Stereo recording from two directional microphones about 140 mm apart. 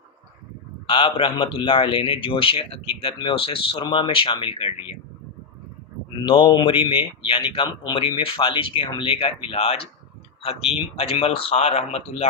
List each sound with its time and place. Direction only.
0.9 s speech: 40° left (ahead or behind)
6.2 s speech: 35° left (ahead or behind)
10.9 s speech: 45° left (ahead or behind)